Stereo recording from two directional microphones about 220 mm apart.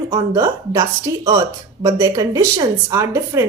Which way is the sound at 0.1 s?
20° right (ahead or behind).